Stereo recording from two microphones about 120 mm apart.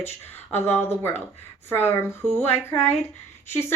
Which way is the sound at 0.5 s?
20° left (ahead or behind).